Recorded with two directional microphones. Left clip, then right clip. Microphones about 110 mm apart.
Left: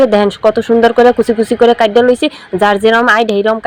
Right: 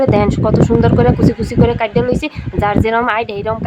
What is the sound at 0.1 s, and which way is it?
A woman's voice, 35° left (ahead or behind).